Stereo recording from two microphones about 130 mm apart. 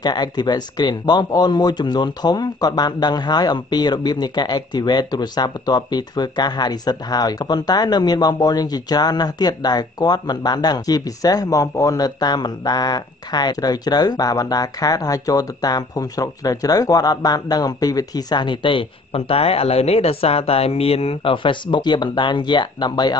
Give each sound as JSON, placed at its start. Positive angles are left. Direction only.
{"t": 0.0, "sound": "speech", "side_deg": 35}